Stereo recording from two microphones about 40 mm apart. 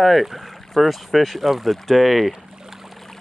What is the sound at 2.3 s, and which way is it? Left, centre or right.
Boat, centre.